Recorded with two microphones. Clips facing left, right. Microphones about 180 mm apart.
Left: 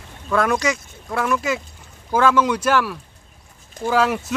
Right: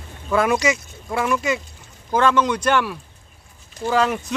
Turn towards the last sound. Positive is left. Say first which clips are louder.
# left 1 dB
turn(degrees=5)  # may be behind; listen again after turning